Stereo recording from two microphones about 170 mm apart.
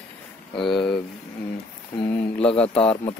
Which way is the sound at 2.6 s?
5° left (ahead or behind).